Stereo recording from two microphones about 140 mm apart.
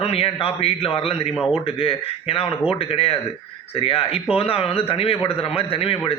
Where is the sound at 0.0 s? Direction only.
45° left (ahead or behind).